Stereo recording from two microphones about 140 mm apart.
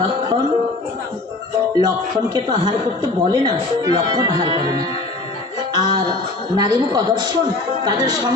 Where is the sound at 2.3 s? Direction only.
30° right (ahead or behind).